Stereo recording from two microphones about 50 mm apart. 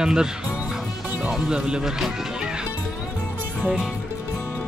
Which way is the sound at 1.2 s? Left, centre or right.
Centre.